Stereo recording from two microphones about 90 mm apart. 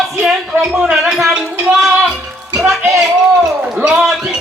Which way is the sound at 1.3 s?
10° right (ahead or behind).